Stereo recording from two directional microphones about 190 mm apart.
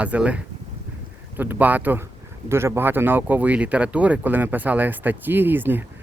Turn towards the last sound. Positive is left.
turn(degrees=-10)  # may be behind; listen again after turning